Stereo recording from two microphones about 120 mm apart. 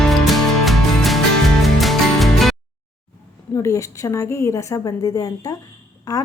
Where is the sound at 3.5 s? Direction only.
25° left (ahead or behind).